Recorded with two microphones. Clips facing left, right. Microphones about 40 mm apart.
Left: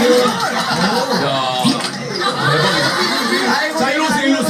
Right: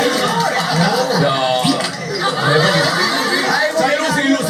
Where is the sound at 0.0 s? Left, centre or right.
Left.